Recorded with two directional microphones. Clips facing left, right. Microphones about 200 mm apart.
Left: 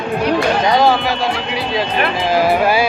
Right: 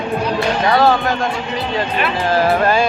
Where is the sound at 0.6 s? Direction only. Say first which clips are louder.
Right 3 dB; 15° left (ahead or behind).